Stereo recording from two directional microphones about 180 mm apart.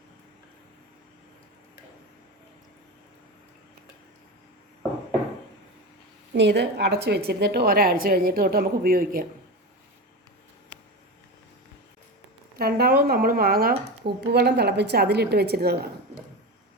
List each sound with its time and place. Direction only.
6.3 s a woman's voice: 70° right (ahead or behind); by 9.2 s 55° right (ahead or behind)
12.5 s speech: 60° right (ahead or behind)